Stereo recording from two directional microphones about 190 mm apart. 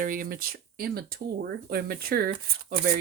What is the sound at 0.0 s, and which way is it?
A woman's voice, 45° right (ahead or behind).